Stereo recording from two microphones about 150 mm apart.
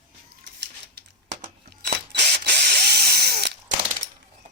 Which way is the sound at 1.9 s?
90° right.